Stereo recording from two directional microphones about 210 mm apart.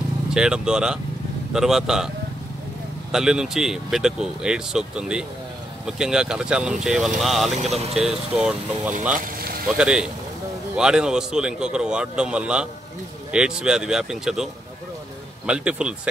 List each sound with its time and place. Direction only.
0.3 s speech: 5° right (ahead or behind)
3.1 s speech: 5° right (ahead or behind)
9.2 s vehicle: 45° right (ahead or behind)
9.8 s speech: 5° right (ahead or behind)